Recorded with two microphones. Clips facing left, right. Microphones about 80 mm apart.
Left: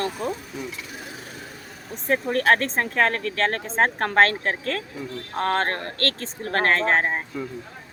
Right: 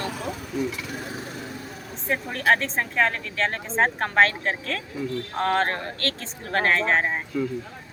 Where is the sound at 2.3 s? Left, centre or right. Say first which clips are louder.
Left 1 dB; left.